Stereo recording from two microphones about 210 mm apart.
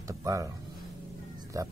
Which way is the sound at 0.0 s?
15° right (ahead or behind).